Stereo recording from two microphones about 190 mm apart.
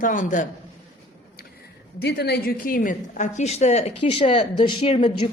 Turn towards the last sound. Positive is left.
turn(degrees=30)  # may be behind; listen again after turning